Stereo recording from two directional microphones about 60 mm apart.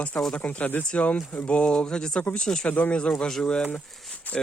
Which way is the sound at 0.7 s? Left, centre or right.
Left.